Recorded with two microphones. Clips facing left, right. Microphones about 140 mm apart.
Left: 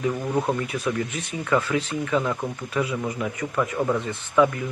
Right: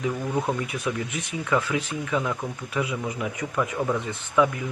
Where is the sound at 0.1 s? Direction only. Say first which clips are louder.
Left 2 dB; 15° left (ahead or behind).